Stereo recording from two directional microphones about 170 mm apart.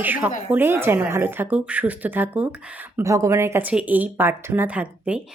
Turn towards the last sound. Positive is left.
turn(degrees=-5)  # may be behind; listen again after turning